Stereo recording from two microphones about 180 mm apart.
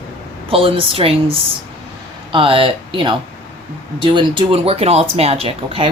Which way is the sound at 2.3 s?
30° right (ahead or behind).